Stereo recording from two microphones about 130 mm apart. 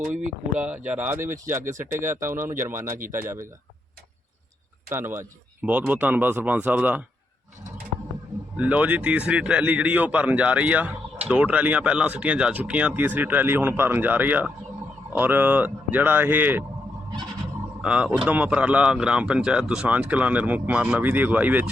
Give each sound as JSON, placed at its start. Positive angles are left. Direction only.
{"t": 0.1, "sound": "speech", "side_deg": -70}
{"t": 0.6, "sound": "speech", "side_deg": -10}
{"t": 4.9, "sound": "speech", "side_deg": -20}
{"t": 8.5, "sound": "speech", "side_deg": -10}
{"t": 17.8, "sound": "speech", "side_deg": -10}